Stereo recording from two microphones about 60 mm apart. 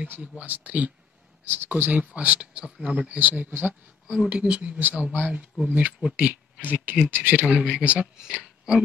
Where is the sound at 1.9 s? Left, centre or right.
Right.